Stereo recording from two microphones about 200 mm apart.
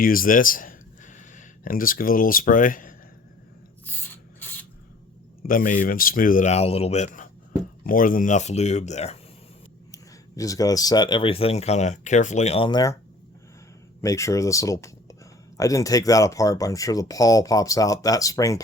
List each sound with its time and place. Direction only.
0.0 s speech: 45° left (ahead or behind)
3.8 s rub: 10° left (ahead or behind)
5.4 s a man's voice: 45° left (ahead or behind)
9.9 s speech: 15° left (ahead or behind)
14.0 s speech: 15° left (ahead or behind)